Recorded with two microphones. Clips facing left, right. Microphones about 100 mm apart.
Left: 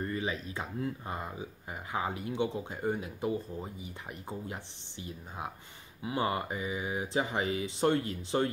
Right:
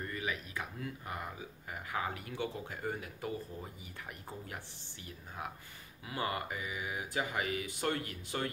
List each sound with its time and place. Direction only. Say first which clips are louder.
0.0 s speech: left 5 dB; 30° left (ahead or behind)
6.0 s speech: left 5 dB; 25° left (ahead or behind)